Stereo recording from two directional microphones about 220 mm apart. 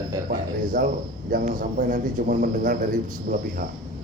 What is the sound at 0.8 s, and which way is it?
Speech, 40° right (ahead or behind).